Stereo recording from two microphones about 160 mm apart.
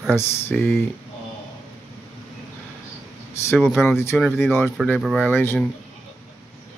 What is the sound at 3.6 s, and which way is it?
Speech, centre (ahead or behind).